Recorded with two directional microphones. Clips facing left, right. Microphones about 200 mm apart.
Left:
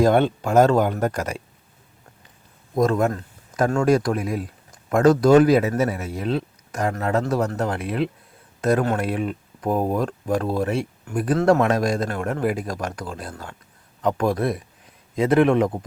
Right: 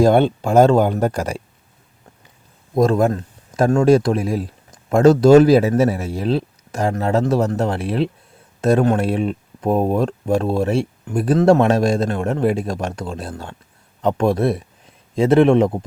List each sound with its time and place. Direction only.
0.0 s speech: 30° right (ahead or behind)
2.7 s speech: 30° right (ahead or behind)